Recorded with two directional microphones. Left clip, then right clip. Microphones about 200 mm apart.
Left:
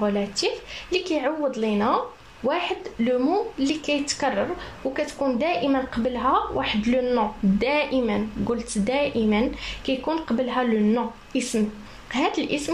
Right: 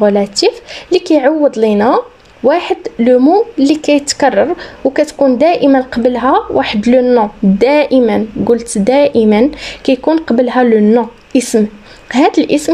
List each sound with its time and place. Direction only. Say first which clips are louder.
0.0 s speech: right 14 dB; 50° right (ahead or behind)